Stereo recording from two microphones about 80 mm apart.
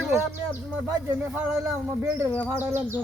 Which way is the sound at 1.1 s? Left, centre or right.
Right.